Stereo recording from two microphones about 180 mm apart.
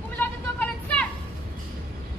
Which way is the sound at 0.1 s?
10° left (ahead or behind).